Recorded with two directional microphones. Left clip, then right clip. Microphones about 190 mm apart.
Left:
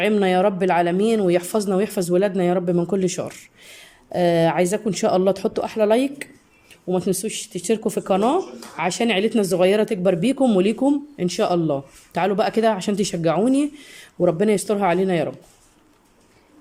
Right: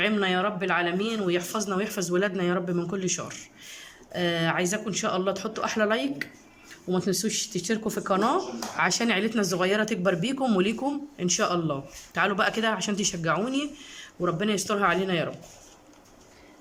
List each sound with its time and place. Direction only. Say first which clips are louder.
0.0 s speech: left 7 dB; 25° left (ahead or behind)